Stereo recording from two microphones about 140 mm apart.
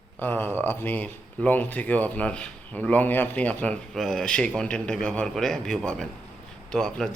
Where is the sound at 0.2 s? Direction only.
15° left (ahead or behind).